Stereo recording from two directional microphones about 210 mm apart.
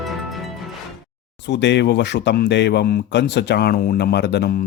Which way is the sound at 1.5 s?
55° left (ahead or behind).